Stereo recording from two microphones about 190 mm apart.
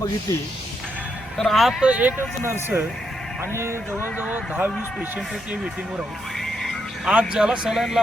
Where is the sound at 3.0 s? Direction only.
Centre (ahead or behind).